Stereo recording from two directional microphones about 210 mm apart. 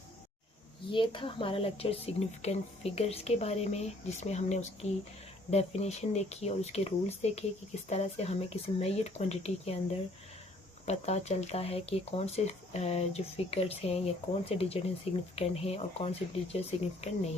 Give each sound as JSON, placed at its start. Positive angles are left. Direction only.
{"t": 0.9, "sound": "speech", "side_deg": 25}
{"t": 10.8, "sound": "speech", "side_deg": 30}